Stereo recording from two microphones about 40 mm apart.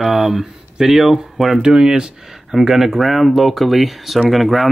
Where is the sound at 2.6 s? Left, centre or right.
Centre.